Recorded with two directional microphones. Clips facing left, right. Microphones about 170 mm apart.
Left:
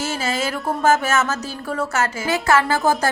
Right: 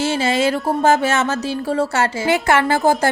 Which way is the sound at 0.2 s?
30° right (ahead or behind).